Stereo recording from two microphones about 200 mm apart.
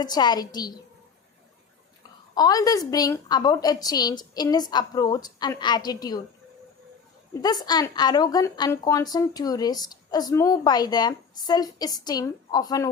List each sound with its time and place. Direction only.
0.0 s a woman's voice: 20° left (ahead or behind)
2.3 s a woman's voice: 20° left (ahead or behind)
7.4 s a woman's voice: 20° left (ahead or behind)